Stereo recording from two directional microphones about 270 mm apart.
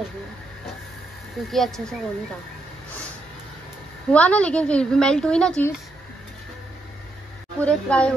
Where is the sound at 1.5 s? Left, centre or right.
Centre.